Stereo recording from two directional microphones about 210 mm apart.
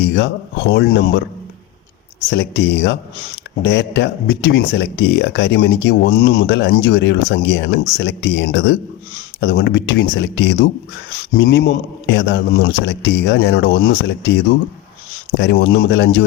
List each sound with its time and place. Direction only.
0.0 s speech: 60° left (ahead or behind)
2.3 s speech: 55° left (ahead or behind)